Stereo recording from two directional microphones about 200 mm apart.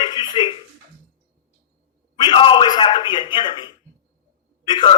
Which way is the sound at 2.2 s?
25° left (ahead or behind).